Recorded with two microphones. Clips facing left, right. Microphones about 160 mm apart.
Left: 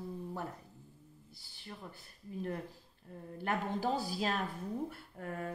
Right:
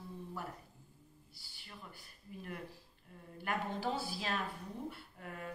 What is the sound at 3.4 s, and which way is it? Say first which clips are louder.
Speech: left 3 dB; 45° left (ahead or behind).